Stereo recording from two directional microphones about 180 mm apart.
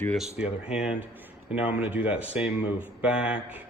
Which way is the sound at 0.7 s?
5° right (ahead or behind).